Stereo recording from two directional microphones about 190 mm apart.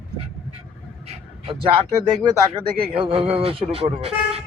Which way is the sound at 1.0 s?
30° right (ahead or behind).